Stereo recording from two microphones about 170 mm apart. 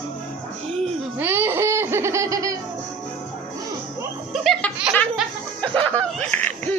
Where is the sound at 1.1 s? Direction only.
10° right (ahead or behind).